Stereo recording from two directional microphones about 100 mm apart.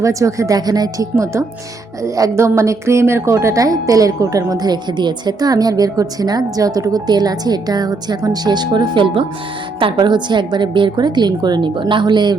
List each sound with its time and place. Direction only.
0.0 s a woman's voice: 30° right (ahead or behind)
1.1 s a woman's voice: 30° right (ahead or behind); by 12.4 s 45° right (ahead or behind)